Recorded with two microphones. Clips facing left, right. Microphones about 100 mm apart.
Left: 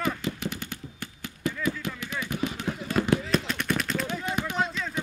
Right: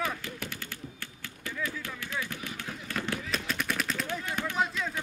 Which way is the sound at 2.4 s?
20° left (ahead or behind).